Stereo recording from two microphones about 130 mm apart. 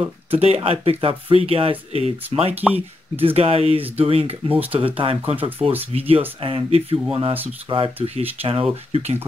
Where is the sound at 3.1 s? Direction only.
50° right (ahead or behind).